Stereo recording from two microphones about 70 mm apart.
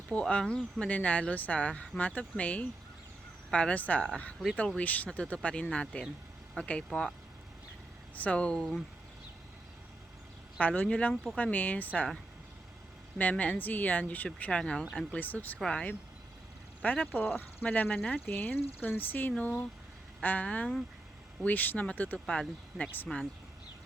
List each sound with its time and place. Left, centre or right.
0.1 s speech: centre
8.1 s speech: centre
10.6 s speech: left
11.5 s speech: left
13.1 s speech: left
14.6 s speech: centre
15.5 s speech: centre
16.8 s speech: centre
18.3 s speech: left
22.3 s speech: centre